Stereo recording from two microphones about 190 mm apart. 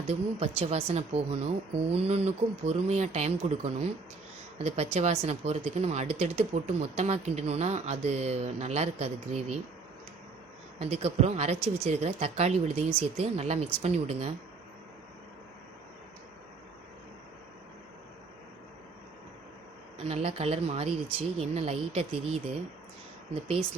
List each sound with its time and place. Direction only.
0.1 s speech: 35° right (ahead or behind)
10.8 s speech: 30° right (ahead or behind)
20.1 s speech: 35° right (ahead or behind)